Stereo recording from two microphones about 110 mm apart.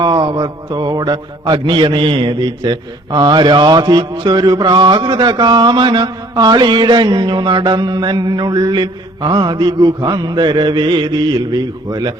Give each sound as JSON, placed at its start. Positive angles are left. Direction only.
{"t": 0.0, "sound": "a man's voice", "side_deg": -40}